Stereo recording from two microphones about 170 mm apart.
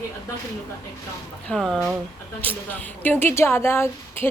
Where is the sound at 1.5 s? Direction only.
5° left (ahead or behind).